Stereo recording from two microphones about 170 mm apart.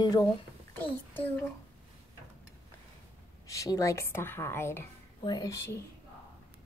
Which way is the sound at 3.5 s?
20° left (ahead or behind).